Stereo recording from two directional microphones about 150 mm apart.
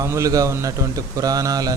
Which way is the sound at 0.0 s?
20° right (ahead or behind).